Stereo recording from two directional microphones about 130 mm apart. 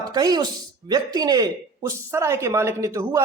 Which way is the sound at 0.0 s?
30° right (ahead or behind).